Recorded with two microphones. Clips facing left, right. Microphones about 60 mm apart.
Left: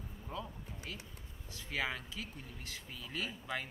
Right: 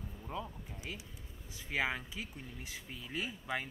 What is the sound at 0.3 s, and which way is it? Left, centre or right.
Speech, centre.